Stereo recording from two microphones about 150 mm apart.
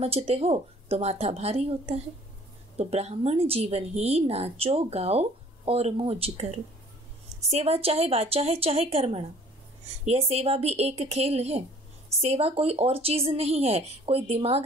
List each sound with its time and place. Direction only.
0.0 s speech: 40° right (ahead or behind)